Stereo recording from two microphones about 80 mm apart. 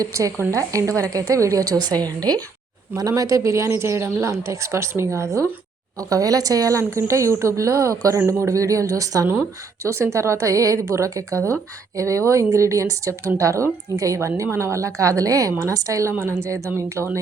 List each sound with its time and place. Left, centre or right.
0.0 s a woman's voice: right
2.9 s speech: right